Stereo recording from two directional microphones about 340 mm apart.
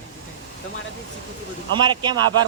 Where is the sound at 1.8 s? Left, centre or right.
Centre.